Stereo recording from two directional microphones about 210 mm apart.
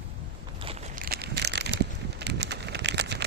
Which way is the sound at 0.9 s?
45° right (ahead or behind).